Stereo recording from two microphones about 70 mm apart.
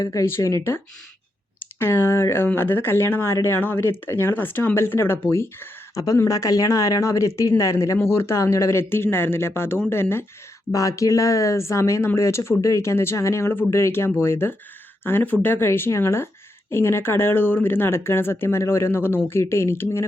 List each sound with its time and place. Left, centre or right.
0.0 s speech: left
0.3 s speech: left
1.8 s speech: left
6.2 s speech: left
10.7 s speech: left